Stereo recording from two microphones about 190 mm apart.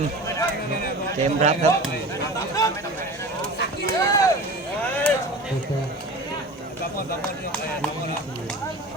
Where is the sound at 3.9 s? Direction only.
20° left (ahead or behind).